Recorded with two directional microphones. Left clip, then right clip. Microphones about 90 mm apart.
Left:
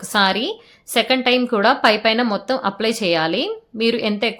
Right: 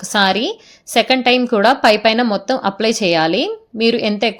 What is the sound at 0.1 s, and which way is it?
A woman's voice, 45° right (ahead or behind).